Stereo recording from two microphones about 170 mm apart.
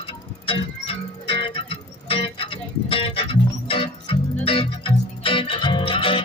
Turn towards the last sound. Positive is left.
turn(degrees=30)  # may be behind; listen again after turning